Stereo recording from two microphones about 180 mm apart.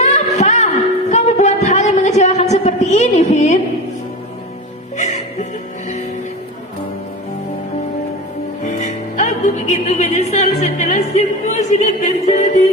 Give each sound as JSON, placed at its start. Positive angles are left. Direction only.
{"t": 0.0, "sound": "a sound", "side_deg": 40}
{"t": 4.9, "sound": "music", "side_deg": 40}
{"t": 8.6, "sound": "music", "side_deg": 40}